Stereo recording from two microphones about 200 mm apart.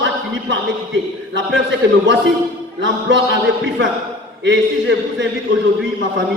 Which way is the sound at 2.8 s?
65° right (ahead or behind).